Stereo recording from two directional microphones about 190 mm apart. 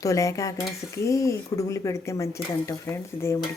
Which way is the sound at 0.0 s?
15° left (ahead or behind).